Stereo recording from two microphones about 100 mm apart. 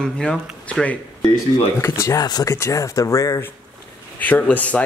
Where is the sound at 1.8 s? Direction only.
30° left (ahead or behind).